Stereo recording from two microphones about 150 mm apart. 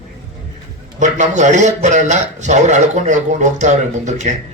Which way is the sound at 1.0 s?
55° right (ahead or behind).